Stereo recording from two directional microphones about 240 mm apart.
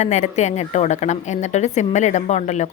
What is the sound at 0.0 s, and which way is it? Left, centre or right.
A woman's voice, left.